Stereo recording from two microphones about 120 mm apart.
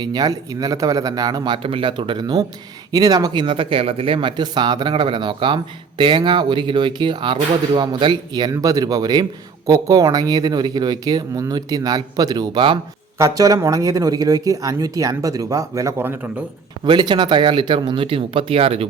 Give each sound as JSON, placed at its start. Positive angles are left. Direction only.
{"t": 0.0, "sound": "speech", "side_deg": -35}
{"t": 1.5, "sound": "speech", "side_deg": -50}
{"t": 13.1, "sound": "speech", "side_deg": -25}
{"t": 16.8, "sound": "speech", "side_deg": -40}